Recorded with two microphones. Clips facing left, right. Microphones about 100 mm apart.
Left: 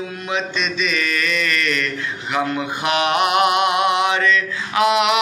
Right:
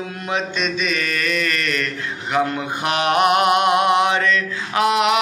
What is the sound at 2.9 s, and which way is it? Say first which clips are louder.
Mantra: right 2 dB; 40° right (ahead or behind).